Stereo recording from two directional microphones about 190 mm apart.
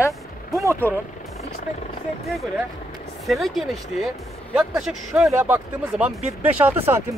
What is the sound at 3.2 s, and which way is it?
Speech, centre (ahead or behind).